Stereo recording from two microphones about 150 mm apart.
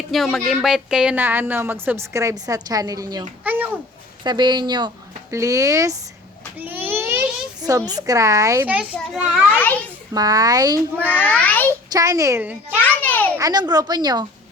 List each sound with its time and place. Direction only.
0.1 s speech: centre (ahead or behind); by 3.2 s 25° right (ahead or behind)
3.4 s a sound: 10° right (ahead or behind)
4.2 s a woman's voice: 30° right (ahead or behind)
6.6 s a sound: 10° right (ahead or behind)
7.6 s a woman's voice: 25° right (ahead or behind)
8.6 s speech: 10° right (ahead or behind)
9.5 s a child's voice: 10° left (ahead or behind)
10.2 s a woman's voice: 25° right (ahead or behind)
11.0 s a child's voice: 10° left (ahead or behind)
11.9 s a woman's voice: 20° right (ahead or behind)
12.8 s a sound: 10° left (ahead or behind)
13.3 s a woman's voice: 25° right (ahead or behind)